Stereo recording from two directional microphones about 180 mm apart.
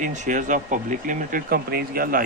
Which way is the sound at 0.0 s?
45° right (ahead or behind).